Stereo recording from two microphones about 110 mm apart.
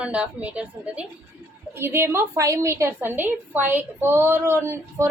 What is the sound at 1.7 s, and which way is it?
A woman's voice, 20° right (ahead or behind).